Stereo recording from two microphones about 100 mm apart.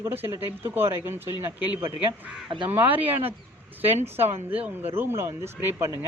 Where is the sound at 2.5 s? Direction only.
55° right (ahead or behind).